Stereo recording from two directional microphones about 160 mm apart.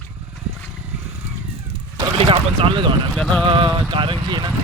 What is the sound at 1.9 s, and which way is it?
Speech, 35° right (ahead or behind).